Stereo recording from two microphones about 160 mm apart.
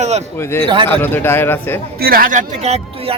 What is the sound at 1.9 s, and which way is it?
Speech, 65° right (ahead or behind).